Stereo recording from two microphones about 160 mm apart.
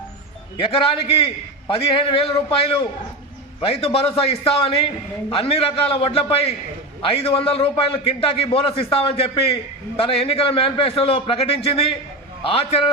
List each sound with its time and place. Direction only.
0.6 s a man's voice: 35° left (ahead or behind)
3.6 s a man's voice: 35° left (ahead or behind)